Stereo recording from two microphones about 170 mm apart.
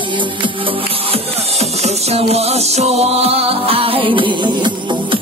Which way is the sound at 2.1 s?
35° right (ahead or behind).